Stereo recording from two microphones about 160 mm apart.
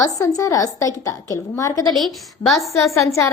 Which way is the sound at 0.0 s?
20° left (ahead or behind).